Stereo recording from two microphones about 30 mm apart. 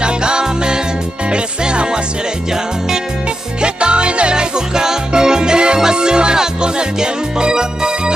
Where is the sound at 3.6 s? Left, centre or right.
Right.